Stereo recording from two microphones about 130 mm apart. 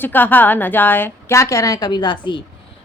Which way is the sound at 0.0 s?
15° left (ahead or behind).